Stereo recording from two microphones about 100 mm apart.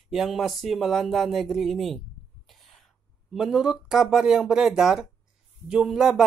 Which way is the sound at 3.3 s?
5° right (ahead or behind).